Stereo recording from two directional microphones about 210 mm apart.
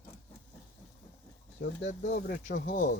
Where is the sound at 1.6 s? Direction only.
55° left (ahead or behind).